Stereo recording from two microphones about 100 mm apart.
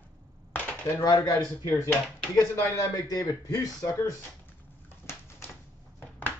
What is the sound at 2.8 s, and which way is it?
Speech, 35° left (ahead or behind).